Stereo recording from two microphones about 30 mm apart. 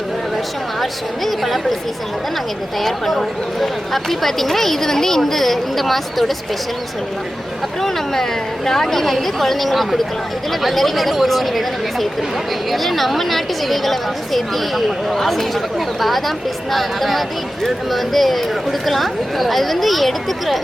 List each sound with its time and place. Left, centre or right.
0.8 s a woman's voice: centre
2.8 s speech: centre
7.8 s a woman's voice: centre